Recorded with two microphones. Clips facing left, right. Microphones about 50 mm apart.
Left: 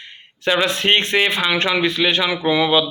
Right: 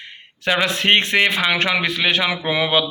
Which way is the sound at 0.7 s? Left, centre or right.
Right.